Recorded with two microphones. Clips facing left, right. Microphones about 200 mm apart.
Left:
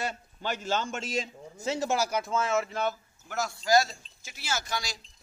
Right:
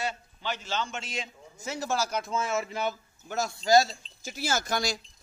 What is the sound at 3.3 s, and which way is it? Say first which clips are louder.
Speech: right 2 dB; 25° right (ahead or behind).